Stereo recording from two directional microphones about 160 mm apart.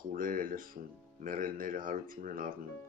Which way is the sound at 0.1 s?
60° right (ahead or behind).